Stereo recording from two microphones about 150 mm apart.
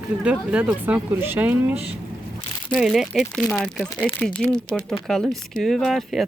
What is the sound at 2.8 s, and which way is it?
Speech, centre (ahead or behind).